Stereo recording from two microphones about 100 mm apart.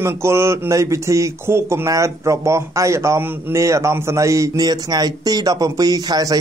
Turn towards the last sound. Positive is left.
turn(degrees=-40)  # may be behind; listen again after turning